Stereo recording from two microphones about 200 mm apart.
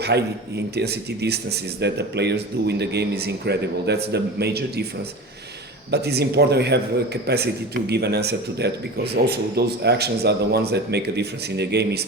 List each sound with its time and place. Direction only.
0.0 s a man's voice: 55° right (ahead or behind)
5.9 s a man's voice: 55° right (ahead or behind)